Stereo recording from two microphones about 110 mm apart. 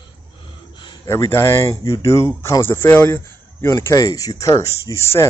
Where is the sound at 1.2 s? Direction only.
25° left (ahead or behind).